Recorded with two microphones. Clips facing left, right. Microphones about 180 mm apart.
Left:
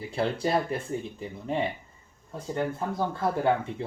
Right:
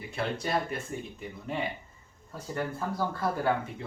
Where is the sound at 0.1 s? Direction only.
30° left (ahead or behind).